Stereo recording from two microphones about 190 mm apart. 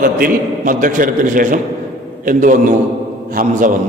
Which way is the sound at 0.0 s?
45° right (ahead or behind).